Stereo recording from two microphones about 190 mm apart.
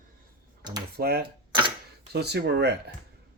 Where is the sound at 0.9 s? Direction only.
55° right (ahead or behind).